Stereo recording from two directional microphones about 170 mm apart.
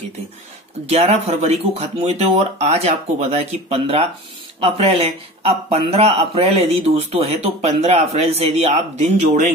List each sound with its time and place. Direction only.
0.8 s a man's voice: 40° right (ahead or behind)